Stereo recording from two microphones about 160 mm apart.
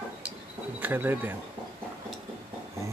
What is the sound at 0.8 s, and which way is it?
Speech, 10° right (ahead or behind).